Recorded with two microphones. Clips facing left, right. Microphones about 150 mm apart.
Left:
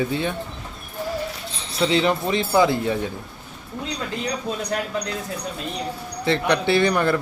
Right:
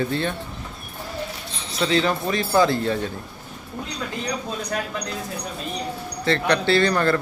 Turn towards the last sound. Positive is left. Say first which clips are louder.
# even
turn(degrees=15)  # may be behind; listen again after turning